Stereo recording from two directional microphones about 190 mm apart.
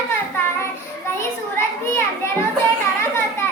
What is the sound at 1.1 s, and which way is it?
Children playing, 15° left (ahead or behind).